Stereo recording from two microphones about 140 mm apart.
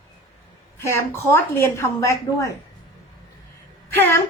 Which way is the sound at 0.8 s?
20° left (ahead or behind).